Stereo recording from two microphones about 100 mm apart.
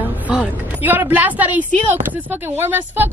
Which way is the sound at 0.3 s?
15° right (ahead or behind).